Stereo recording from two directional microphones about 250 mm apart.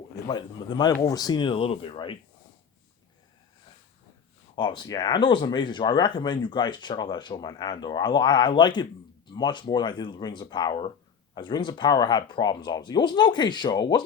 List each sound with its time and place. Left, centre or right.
0.3 s speech: centre
4.5 s speech: centre